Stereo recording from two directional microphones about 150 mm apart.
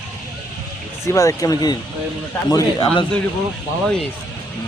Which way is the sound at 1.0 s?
20° left (ahead or behind).